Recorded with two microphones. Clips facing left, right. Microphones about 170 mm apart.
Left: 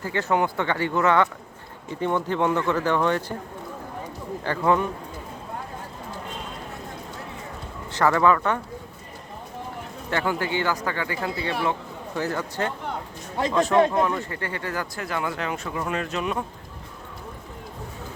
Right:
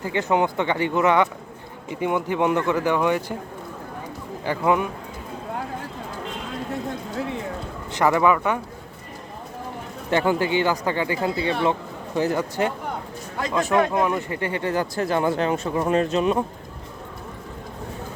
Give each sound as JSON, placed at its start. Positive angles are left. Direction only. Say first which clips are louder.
{"t": 0.0, "sound": "speech", "louder": "right 2 dB", "side_deg": -15}
{"t": 4.4, "sound": "speech", "louder": "right 1 dB", "side_deg": -15}
{"t": 7.9, "sound": "speech", "louder": "right 1 dB", "side_deg": -15}
{"t": 10.1, "sound": "speech", "louder": "right 5 dB", "side_deg": -20}